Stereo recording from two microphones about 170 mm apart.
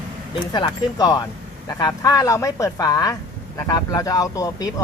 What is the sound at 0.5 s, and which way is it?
Speech, 25° left (ahead or behind).